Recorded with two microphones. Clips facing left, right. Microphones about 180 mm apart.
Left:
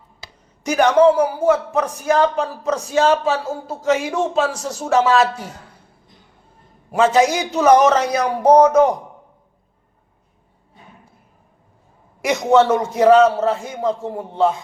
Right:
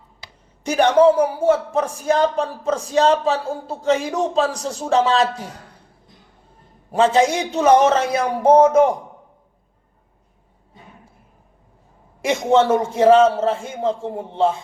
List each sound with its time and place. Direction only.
0.6 s a man's voice: 30° right (ahead or behind)
6.9 s a man's voice: 30° right (ahead or behind)
12.2 s a man's voice: 30° right (ahead or behind)